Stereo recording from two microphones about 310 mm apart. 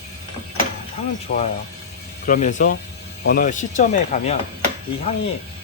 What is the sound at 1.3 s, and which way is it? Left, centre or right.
Speech, left.